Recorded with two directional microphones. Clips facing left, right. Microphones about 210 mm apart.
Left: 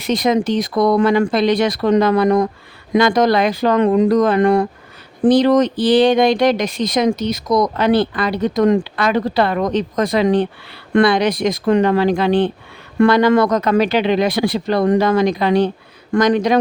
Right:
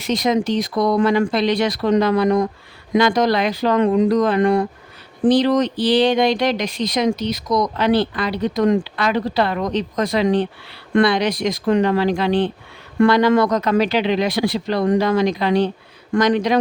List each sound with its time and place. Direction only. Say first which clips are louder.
0.0 s speech: left 2 dB; 55° left (ahead or behind)